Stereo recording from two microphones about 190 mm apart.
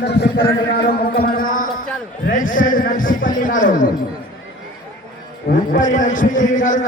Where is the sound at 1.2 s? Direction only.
50° left (ahead or behind).